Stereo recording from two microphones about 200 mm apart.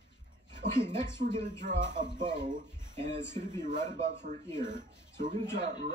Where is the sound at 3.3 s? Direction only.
35° right (ahead or behind).